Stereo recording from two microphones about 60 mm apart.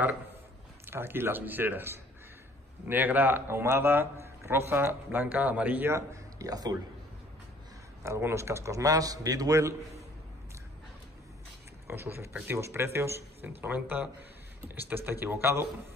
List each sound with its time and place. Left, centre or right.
0.8 s speech: right
6.4 s speech: right
8.0 s a man's voice: right
9.6 s a man's voice: right
11.9 s speech: right
14.8 s speech: right